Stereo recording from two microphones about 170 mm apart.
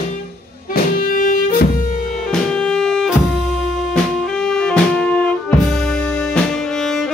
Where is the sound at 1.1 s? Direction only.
55° left (ahead or behind).